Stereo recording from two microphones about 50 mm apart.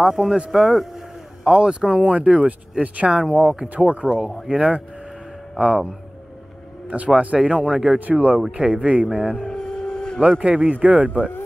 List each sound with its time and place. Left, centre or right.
0.0 s speech: centre
1.5 s speech: centre
3.4 s speech: right
4.1 s speech: centre; by 5.9 s right
7.2 s speech: right
8.0 s speech: right
9.3 s a sound: centre
10.4 s speech: right